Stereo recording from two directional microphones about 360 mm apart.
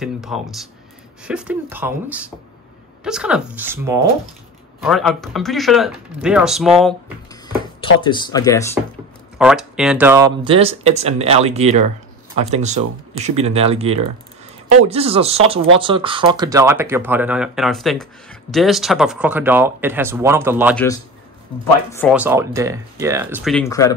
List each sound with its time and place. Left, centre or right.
0.0 s speech: centre
7.4 s speech: centre
21.9 s speech: centre